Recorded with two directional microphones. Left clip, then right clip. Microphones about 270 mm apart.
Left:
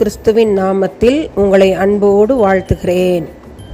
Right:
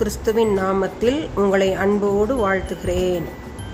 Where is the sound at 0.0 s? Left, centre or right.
Left.